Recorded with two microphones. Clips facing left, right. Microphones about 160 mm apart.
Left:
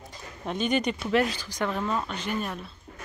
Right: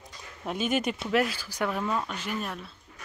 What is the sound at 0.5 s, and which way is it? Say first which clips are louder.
Speech: left 2 dB; 5° right (ahead or behind).